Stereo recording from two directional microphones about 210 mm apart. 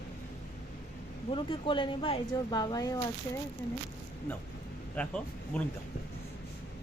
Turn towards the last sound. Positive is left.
turn(degrees=5)  # may be behind; listen again after turning